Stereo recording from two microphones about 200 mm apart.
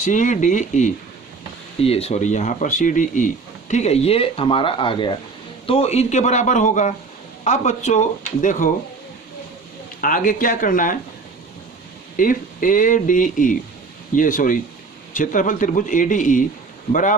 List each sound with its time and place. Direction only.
0.0 s speech: 40° left (ahead or behind)
10.0 s speech: 45° left (ahead or behind)
12.1 s speech: 40° left (ahead or behind)